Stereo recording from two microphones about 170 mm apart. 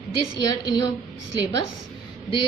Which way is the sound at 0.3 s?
25° left (ahead or behind).